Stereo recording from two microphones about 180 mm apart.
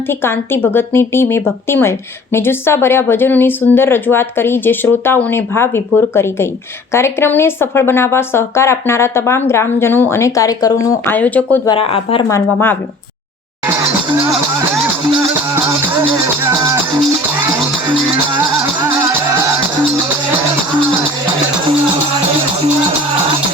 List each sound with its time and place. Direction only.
0.1 s speech: 15° left (ahead or behind)
11.7 s speech: 30° left (ahead or behind)
12.3 s speech: 10° left (ahead or behind)
15.0 s music: 15° right (ahead or behind)